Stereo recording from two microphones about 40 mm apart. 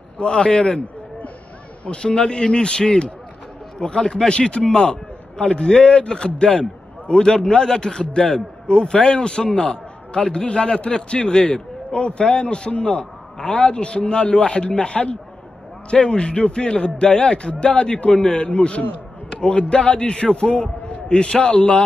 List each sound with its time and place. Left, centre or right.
0.2 s a man's voice: left